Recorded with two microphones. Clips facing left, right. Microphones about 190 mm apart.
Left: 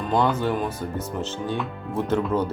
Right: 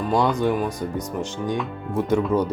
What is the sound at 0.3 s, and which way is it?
Speech, 15° right (ahead or behind).